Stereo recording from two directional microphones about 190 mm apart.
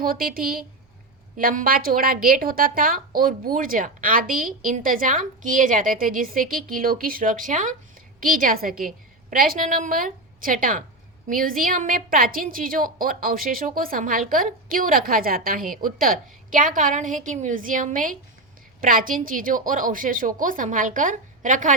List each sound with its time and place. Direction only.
0.0 s a woman's voice: 50° right (ahead or behind)